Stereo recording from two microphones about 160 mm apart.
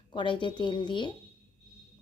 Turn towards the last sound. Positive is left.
turn(degrees=30)  # may be behind; listen again after turning